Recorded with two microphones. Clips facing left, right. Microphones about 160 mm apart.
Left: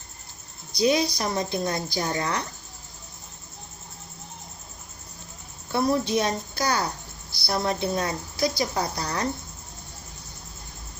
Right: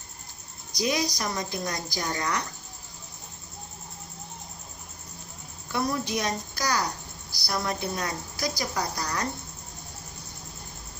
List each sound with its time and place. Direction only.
0.7 s a woman's voice: 25° left (ahead or behind)
5.7 s a woman's voice: 30° left (ahead or behind)